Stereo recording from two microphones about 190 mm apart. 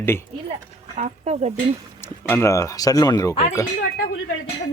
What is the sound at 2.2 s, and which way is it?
Speech, 15° left (ahead or behind).